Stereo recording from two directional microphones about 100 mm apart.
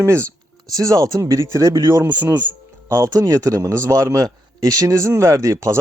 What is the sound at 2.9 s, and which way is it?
A man's voice, 30° right (ahead or behind).